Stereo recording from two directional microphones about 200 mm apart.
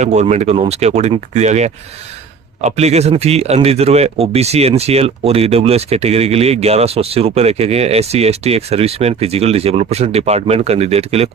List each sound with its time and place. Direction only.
0.0 s a man's voice: 35° right (ahead or behind)